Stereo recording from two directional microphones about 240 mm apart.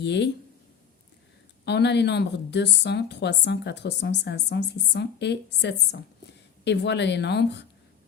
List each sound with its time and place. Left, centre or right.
0.0 s a woman's voice: left
1.6 s a woman's voice: left